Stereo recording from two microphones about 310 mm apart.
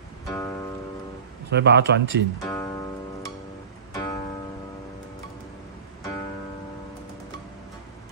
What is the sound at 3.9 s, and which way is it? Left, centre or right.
Music, centre.